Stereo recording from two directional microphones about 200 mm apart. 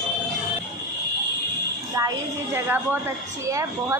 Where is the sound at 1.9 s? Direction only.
15° right (ahead or behind).